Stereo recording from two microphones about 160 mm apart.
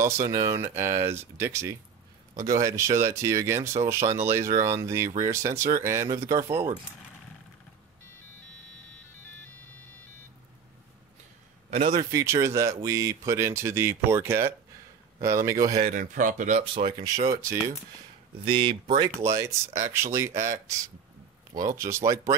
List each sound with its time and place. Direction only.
0.0 s speech: 20° right (ahead or behind)
11.9 s speech: 20° right (ahead or behind)
15.8 s speech: 55° right (ahead or behind)
16.6 s speech: 30° right (ahead or behind)
18.4 s speech: 30° right (ahead or behind)
19.2 s speech: 20° right (ahead or behind)